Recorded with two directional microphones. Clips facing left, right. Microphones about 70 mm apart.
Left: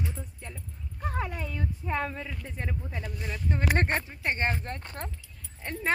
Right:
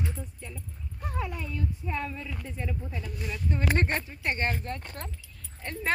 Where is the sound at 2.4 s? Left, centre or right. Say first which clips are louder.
Right 1 dB; left.